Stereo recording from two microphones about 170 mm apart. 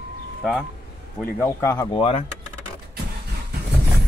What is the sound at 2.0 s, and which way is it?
Speech, 35° left (ahead or behind).